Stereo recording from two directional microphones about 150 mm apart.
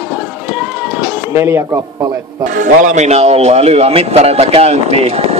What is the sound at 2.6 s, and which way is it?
Speech, 60° right (ahead or behind).